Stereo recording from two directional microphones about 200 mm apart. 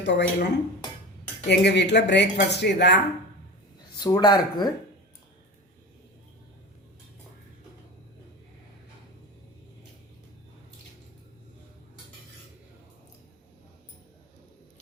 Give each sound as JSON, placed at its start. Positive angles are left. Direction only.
{"t": 0.0, "sound": "speech", "side_deg": 60}
{"t": 3.9, "sound": "speech", "side_deg": 20}